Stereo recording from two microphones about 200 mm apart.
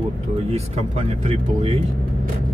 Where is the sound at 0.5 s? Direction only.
35° right (ahead or behind).